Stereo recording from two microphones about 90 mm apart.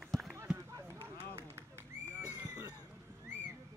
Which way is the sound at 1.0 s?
30° right (ahead or behind).